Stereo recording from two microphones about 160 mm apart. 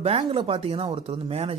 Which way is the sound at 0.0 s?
40° right (ahead or behind).